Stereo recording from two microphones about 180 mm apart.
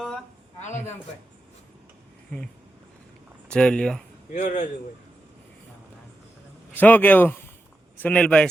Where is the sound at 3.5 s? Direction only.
5° left (ahead or behind).